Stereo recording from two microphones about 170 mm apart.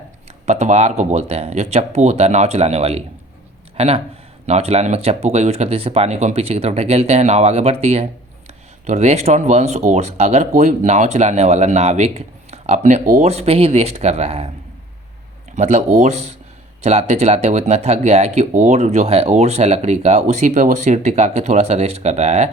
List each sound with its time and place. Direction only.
0.4 s speech: 40° right (ahead or behind)
15.5 s speech: 40° right (ahead or behind)